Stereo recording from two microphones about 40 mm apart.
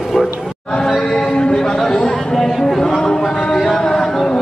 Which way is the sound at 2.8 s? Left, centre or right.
Centre.